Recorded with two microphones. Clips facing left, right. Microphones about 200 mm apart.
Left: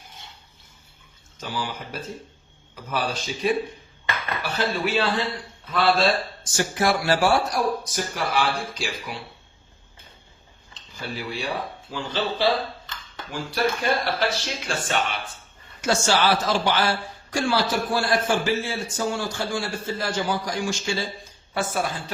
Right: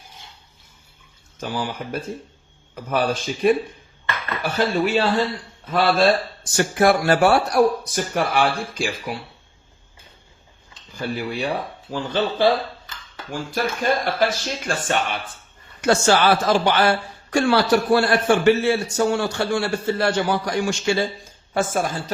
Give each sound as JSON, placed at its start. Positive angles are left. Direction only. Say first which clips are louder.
{"t": 1.4, "sound": "a man's voice", "louder": "right 4 dB", "side_deg": -50}
{"t": 10.9, "sound": "speech", "louder": "right 6 dB", "side_deg": -50}
{"t": 13.5, "sound": "a man's voice", "louder": "right 1 dB", "side_deg": -45}
{"t": 21.5, "sound": "speech", "louder": "right 4 dB", "side_deg": -45}